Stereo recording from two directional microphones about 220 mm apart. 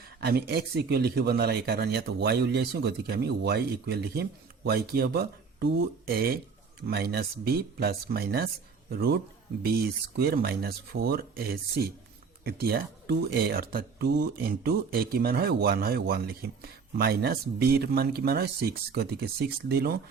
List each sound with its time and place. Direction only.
0.2 s speech: 45° right (ahead or behind)
10.2 s speech: 45° right (ahead or behind)